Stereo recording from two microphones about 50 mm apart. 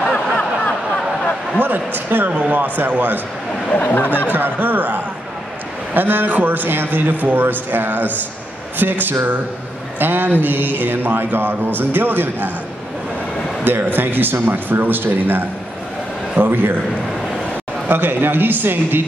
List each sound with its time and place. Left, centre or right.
0.1 s a sound: left
1.6 s speech: right
3.7 s speech: left
4.3 s speech: right
13.7 s speech: right
17.8 s speech: right